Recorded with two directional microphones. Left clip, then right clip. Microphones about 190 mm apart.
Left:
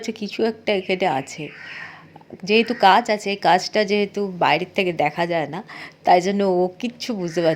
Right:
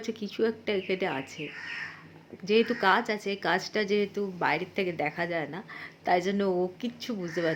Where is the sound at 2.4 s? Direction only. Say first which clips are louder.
Left 9 dB; 30° left (ahead or behind).